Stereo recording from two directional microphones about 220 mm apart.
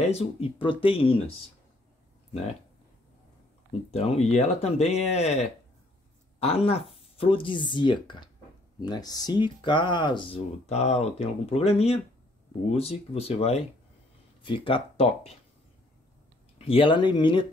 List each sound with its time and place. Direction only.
0.1 s speech: 30° left (ahead or behind)
3.9 s speech: 30° left (ahead or behind)
16.5 s speech: 25° left (ahead or behind)